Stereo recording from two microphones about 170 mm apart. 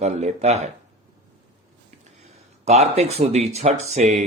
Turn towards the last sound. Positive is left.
turn(degrees=-40)  # may be behind; listen again after turning